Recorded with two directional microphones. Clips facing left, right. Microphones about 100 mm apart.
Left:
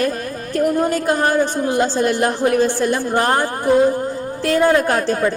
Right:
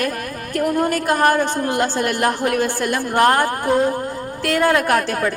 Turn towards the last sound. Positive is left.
turn(degrees=25)  # may be behind; listen again after turning